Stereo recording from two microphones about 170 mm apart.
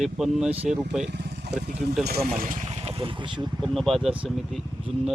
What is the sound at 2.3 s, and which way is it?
Speech, 50° right (ahead or behind).